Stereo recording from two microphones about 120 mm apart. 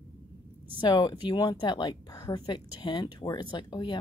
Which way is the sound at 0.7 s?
40° left (ahead or behind).